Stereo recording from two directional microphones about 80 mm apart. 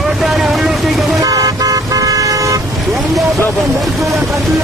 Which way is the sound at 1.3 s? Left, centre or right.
Right.